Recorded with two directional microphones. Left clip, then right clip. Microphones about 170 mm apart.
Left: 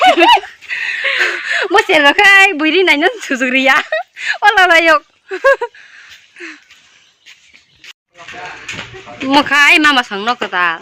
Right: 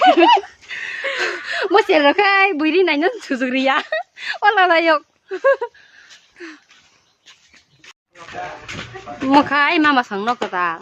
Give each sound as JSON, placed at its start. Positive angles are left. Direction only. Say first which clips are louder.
{"t": 0.0, "sound": "laughter", "louder": "left 3 dB", "side_deg": 10}
{"t": 1.2, "sound": "a woman's voice", "louder": "left 7 dB", "side_deg": 10}
{"t": 9.3, "sound": "speech", "louder": "left 6 dB", "side_deg": 0}